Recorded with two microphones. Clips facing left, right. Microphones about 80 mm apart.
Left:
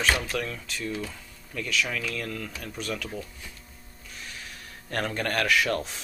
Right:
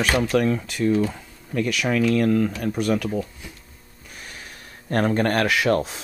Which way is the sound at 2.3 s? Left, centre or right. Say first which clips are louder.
Right 15 dB; right.